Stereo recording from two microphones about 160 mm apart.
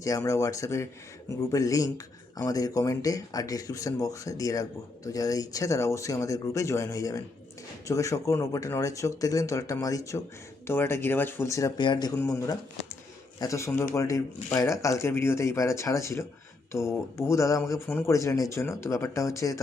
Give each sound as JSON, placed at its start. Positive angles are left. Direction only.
{"t": 0.0, "sound": "speech", "side_deg": 20}